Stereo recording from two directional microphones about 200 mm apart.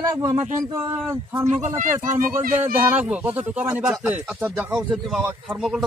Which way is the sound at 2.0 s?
40° right (ahead or behind).